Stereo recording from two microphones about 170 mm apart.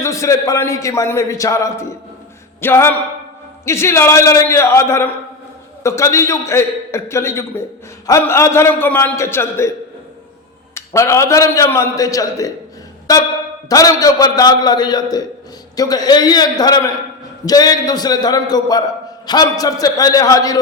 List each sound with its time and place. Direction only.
0.0 s a man's voice: 20° left (ahead or behind)
10.8 s a man's voice: 15° left (ahead or behind)